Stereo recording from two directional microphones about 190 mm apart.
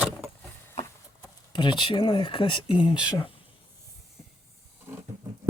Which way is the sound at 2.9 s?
5° right (ahead or behind).